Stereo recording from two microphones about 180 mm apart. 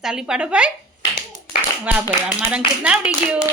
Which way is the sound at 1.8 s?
10° right (ahead or behind).